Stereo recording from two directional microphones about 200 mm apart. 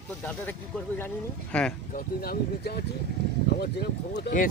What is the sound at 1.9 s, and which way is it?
Speech, 50° left (ahead or behind).